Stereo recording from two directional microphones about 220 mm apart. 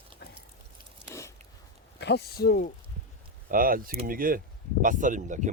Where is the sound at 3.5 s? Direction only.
40° right (ahead or behind).